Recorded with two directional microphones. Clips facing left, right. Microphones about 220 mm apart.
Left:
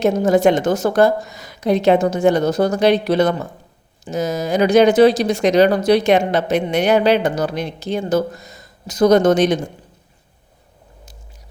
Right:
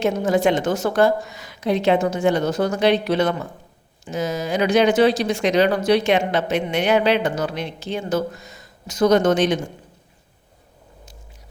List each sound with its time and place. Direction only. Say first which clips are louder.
0.0 s speech: left 5 dB; 40° left (ahead or behind)